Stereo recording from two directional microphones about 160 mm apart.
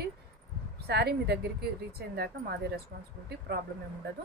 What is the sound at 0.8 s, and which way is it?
Speech, 90° right.